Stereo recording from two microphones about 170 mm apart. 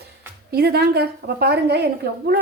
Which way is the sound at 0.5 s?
70° right (ahead or behind).